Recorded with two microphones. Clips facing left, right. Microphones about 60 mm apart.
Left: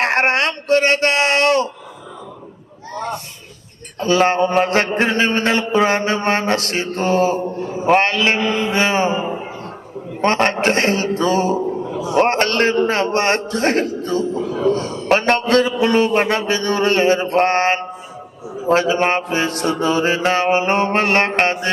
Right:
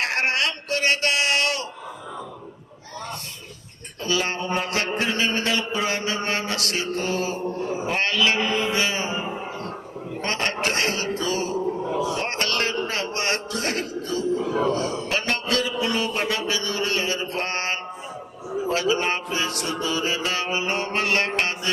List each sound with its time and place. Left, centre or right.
0.0 s speech: left
4.0 s mantra: left
14.5 s a man's voice: right
15.0 s mantra: left